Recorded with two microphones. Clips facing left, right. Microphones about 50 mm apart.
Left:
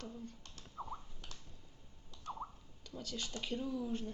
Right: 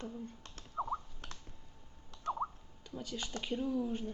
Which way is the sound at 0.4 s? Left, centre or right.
Right.